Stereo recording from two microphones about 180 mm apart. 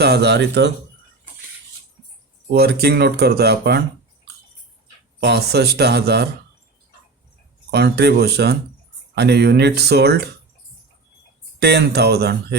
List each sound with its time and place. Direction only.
0.0 s speech: 65° right (ahead or behind)
2.5 s speech: 60° right (ahead or behind)
5.2 s speech: 65° right (ahead or behind)
7.7 s speech: 65° right (ahead or behind)
11.6 s speech: 65° right (ahead or behind)